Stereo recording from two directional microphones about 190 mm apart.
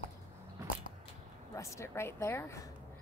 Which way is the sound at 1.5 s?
15° left (ahead or behind).